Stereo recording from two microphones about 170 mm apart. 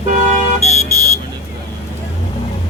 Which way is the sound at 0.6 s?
40° left (ahead or behind).